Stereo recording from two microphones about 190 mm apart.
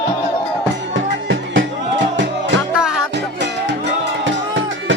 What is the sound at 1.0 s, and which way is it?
Music, 75° right (ahead or behind).